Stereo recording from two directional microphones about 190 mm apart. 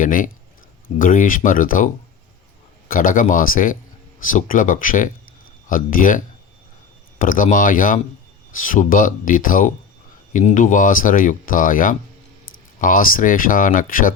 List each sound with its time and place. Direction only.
0.0 s speech: 45° left (ahead or behind)
2.9 s speech: 45° left (ahead or behind)